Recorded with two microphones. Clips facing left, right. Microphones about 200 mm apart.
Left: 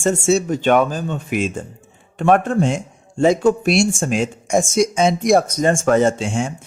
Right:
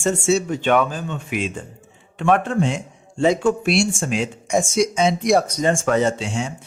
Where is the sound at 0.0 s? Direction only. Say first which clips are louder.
Left 2 dB; 45° left (ahead or behind).